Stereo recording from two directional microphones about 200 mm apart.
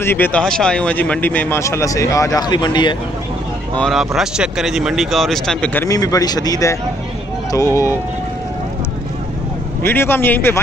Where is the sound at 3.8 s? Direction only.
Centre (ahead or behind); by 7.9 s 15° left (ahead or behind).